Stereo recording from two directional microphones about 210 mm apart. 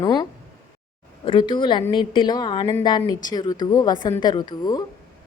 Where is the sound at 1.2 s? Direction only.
25° left (ahead or behind).